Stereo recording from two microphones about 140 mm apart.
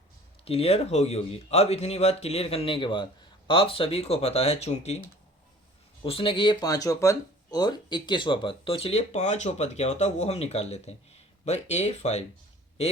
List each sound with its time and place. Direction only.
0.4 s speech: 45° left (ahead or behind)
6.0 s a man's voice: 40° left (ahead or behind)